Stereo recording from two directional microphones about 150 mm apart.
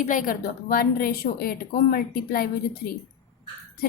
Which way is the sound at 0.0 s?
60° left (ahead or behind).